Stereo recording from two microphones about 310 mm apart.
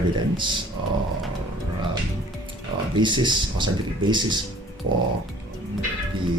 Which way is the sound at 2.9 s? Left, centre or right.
Centre.